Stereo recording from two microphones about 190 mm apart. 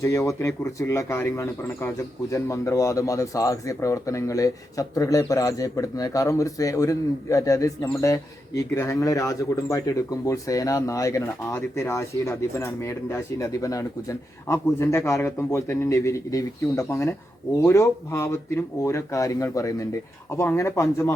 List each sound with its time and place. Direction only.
0.0 s speech: 15° left (ahead or behind)